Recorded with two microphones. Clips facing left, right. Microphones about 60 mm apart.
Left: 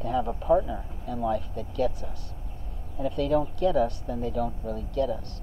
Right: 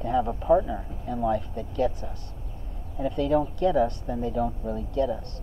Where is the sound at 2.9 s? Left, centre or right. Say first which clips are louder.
Right 1 dB; centre.